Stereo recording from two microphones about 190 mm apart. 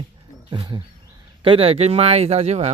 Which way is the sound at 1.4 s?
30° right (ahead or behind).